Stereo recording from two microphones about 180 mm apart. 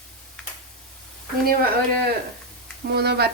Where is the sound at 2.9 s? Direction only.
65° right (ahead or behind).